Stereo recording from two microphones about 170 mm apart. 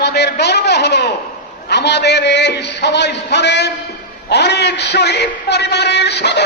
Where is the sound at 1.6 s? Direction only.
80° left.